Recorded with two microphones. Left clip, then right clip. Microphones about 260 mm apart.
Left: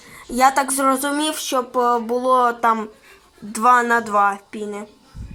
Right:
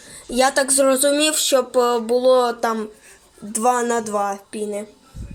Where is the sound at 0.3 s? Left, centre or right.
Centre.